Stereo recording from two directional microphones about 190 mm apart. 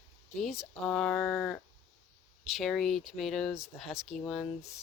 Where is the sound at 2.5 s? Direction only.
Centre (ahead or behind).